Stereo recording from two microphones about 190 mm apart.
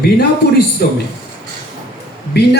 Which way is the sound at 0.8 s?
55° left (ahead or behind).